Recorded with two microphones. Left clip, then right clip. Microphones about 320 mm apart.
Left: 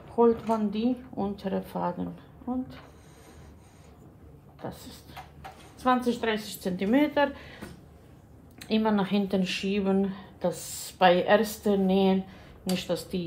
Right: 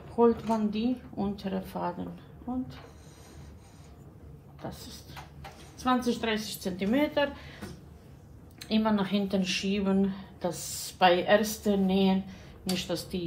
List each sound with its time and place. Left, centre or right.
0.1 s speech: left
4.6 s speech: left